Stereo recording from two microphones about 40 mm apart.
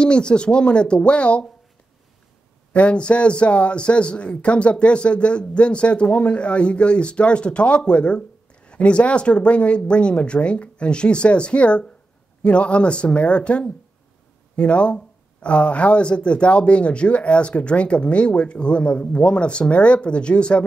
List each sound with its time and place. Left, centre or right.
0.0 s speech: left
2.7 s speech: left